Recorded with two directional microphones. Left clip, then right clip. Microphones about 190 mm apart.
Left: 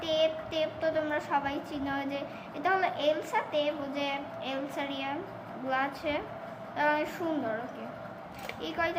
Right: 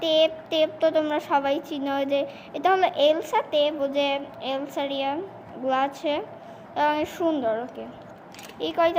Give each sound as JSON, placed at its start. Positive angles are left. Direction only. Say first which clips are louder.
{"t": 0.0, "sound": "a woman's voice", "louder": "right 7 dB", "side_deg": -45}
{"t": 8.6, "sound": "a woman's voice", "louder": "right 10 dB", "side_deg": -45}